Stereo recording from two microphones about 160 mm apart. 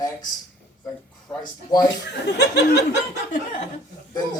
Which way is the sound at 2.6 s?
90° left.